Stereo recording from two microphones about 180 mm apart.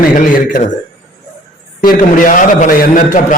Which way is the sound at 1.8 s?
50° left (ahead or behind).